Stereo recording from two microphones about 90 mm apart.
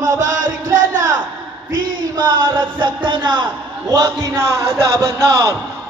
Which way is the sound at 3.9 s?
50° right (ahead or behind).